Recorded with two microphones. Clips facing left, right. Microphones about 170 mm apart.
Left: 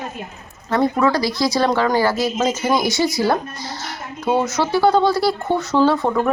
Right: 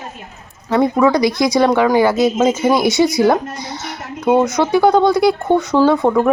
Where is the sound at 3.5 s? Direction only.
65° right (ahead or behind).